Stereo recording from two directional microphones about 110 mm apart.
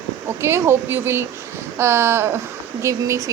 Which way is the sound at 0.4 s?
25° right (ahead or behind).